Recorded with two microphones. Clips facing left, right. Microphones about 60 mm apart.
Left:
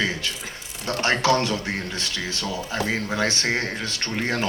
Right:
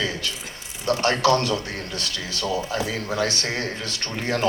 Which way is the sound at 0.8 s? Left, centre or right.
Left.